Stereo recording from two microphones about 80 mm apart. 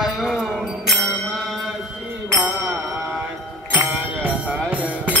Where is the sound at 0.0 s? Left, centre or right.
Centre.